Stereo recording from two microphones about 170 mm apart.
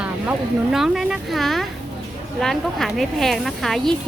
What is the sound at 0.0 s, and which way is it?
Speech, 5° right (ahead or behind).